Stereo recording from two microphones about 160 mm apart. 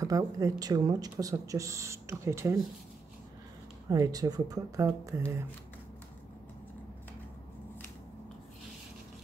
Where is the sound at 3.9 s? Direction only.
25° right (ahead or behind).